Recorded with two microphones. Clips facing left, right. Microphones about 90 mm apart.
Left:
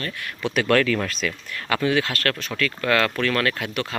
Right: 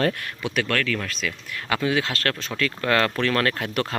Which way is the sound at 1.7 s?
20° right (ahead or behind).